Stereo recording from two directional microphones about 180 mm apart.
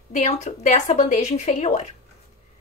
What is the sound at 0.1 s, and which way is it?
Speech, 40° left (ahead or behind).